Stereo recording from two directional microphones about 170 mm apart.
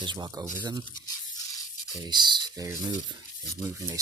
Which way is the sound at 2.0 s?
25° right (ahead or behind).